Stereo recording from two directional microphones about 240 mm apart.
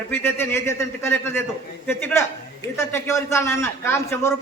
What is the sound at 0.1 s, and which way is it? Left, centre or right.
A man's voice, centre.